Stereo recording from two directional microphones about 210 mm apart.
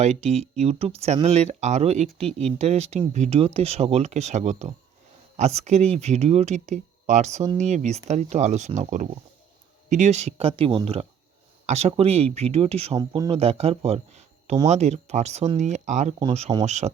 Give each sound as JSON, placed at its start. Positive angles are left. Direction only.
{"t": 0.0, "sound": "speech", "side_deg": -30}
{"t": 13.4, "sound": "speech", "side_deg": -30}